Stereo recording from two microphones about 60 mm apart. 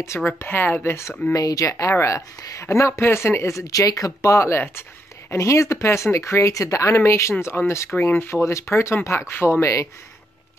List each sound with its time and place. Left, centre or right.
0.0 s speech: left
0.4 s speech: left
1.3 s a woman's voice: left